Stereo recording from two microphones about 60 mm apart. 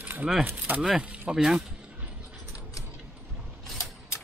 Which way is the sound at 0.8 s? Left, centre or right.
Centre.